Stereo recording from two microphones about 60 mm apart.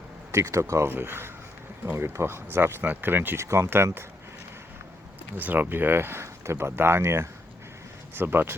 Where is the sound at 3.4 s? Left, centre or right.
Right.